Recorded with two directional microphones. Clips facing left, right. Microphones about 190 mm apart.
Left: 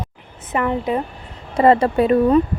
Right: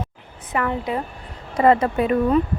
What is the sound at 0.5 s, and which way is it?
Speech, 20° left (ahead or behind).